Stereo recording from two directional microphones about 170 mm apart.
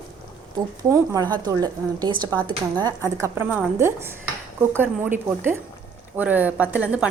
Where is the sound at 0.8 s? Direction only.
20° right (ahead or behind).